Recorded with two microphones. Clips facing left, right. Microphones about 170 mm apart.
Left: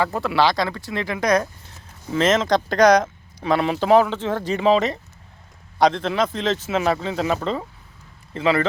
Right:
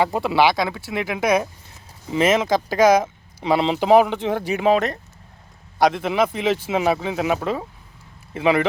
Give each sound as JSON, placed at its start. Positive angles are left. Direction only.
{"t": 0.0, "sound": "speech", "side_deg": -20}
{"t": 0.5, "sound": "speech", "side_deg": -5}
{"t": 3.4, "sound": "a man's voice", "side_deg": -20}